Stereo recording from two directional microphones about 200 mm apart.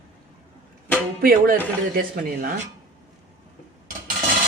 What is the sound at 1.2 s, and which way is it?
Music, 45° right (ahead or behind).